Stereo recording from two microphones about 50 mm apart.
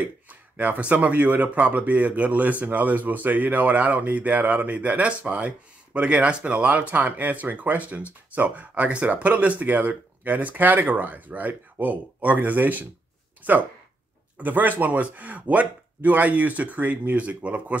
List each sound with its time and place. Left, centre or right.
0.0 s speech: right